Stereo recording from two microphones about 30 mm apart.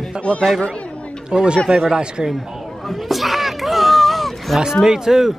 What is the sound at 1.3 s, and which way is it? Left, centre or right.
Speech, right.